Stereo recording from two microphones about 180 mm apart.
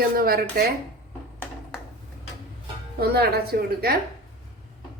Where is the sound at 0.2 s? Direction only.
55° right (ahead or behind).